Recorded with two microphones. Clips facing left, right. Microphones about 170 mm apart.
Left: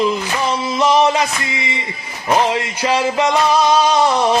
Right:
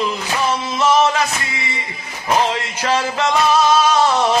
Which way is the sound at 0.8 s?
15° left (ahead or behind).